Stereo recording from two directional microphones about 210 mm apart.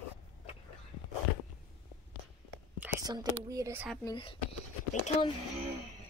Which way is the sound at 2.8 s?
10° right (ahead or behind).